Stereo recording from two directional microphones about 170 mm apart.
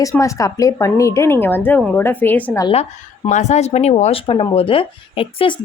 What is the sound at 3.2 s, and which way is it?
A woman's voice, 45° left (ahead or behind).